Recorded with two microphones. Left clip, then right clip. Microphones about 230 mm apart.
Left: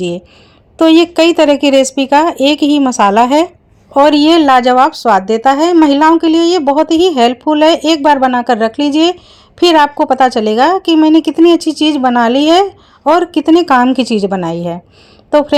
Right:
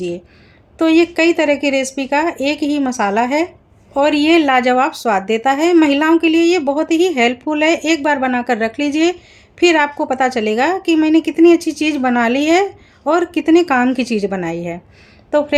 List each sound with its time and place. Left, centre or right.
0.8 s a woman's voice: left